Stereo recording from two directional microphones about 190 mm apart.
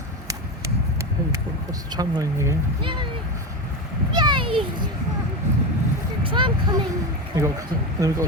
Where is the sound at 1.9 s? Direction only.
20° right (ahead or behind).